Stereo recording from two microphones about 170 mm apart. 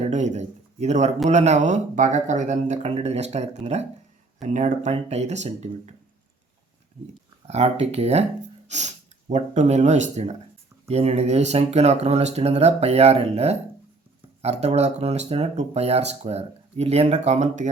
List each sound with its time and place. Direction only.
0.0 s speech: 45° right (ahead or behind)
7.4 s speech: 40° right (ahead or behind)
8.6 s snort: 45° right (ahead or behind)
9.3 s speech: 40° right (ahead or behind)